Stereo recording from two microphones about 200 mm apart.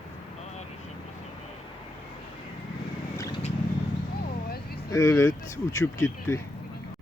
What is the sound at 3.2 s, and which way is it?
Vehicle, 20° left (ahead or behind).